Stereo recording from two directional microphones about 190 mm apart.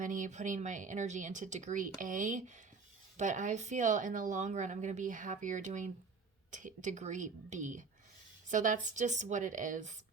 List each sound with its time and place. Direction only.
0.0 s speech: 40° right (ahead or behind)